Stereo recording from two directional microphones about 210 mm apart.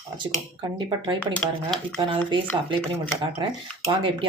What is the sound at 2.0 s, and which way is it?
Speech, 25° right (ahead or behind).